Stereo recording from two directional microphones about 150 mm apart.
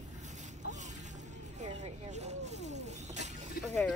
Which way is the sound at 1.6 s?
50° right (ahead or behind).